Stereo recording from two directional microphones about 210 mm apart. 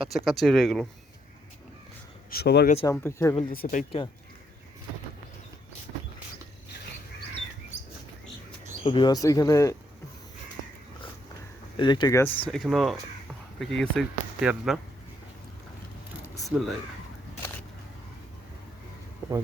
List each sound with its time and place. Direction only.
0.1 s speech: centre (ahead or behind)
2.3 s speech: 50° left (ahead or behind)
2.8 s speech: 10° left (ahead or behind)
3.5 s speech: 40° left (ahead or behind)
8.8 s speech: 25° left (ahead or behind)
11.8 s speech: 20° left (ahead or behind); by 14.8 s centre (ahead or behind)
16.4 s speech: centre (ahead or behind)